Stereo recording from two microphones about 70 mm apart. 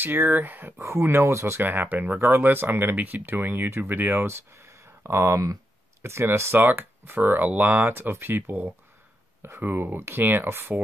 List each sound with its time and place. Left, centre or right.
0.0 s speech: right
1.6 s speech: right